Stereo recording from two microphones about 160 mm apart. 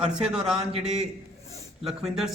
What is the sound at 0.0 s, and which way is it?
Speech, 5° right (ahead or behind).